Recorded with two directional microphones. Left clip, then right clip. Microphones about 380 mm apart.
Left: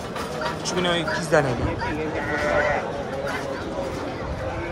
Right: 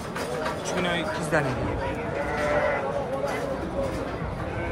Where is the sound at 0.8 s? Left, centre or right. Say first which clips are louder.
Left 5 dB; centre.